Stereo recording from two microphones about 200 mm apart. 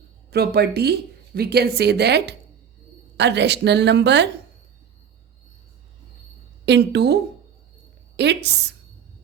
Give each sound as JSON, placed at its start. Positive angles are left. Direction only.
{"t": 0.3, "sound": "a woman's voice", "side_deg": -50}
{"t": 6.7, "sound": "speech", "side_deg": -60}